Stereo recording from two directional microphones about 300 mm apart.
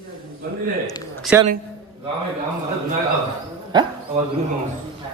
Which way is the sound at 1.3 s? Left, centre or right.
Centre.